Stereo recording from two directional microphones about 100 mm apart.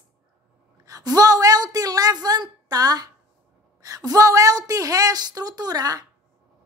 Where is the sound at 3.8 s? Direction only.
35° right (ahead or behind).